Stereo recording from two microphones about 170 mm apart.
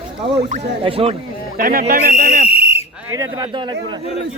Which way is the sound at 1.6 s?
55° right (ahead or behind).